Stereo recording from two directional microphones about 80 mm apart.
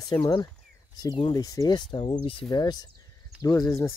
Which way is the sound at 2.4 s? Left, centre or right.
Left.